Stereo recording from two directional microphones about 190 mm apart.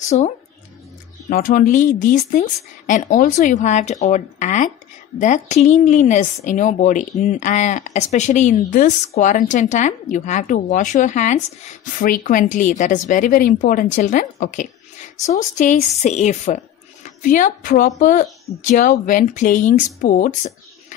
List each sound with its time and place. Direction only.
0.0 s speech: 40° left (ahead or behind)
1.3 s a woman's voice: 50° left (ahead or behind)